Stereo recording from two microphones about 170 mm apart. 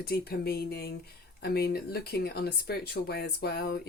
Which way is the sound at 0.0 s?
65° left (ahead or behind).